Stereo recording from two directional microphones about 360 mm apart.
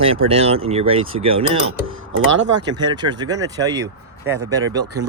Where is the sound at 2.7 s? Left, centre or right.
Centre.